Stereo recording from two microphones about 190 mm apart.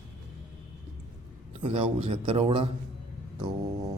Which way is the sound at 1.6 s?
30° right (ahead or behind).